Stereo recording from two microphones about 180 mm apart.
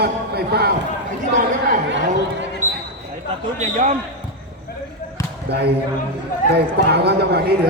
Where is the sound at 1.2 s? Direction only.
50° right (ahead or behind).